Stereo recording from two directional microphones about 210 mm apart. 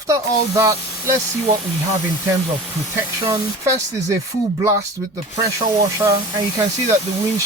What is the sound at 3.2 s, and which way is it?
Speech, 15° right (ahead or behind).